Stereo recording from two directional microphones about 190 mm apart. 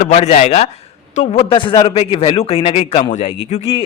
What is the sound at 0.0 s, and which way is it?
A man's voice, 35° left (ahead or behind).